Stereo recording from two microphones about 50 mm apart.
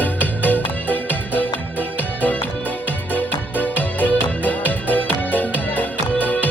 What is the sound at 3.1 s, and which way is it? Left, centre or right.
Music, left.